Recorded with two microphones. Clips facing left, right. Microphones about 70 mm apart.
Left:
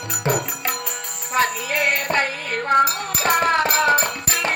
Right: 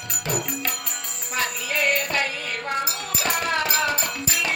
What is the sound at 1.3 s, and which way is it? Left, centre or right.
Music, left.